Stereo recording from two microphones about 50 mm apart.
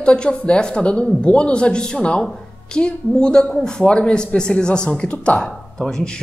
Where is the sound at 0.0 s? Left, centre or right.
Centre.